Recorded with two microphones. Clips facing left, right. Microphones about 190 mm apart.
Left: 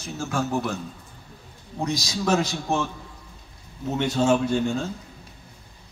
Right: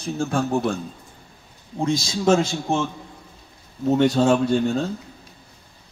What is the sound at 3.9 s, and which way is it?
Speech, 40° right (ahead or behind).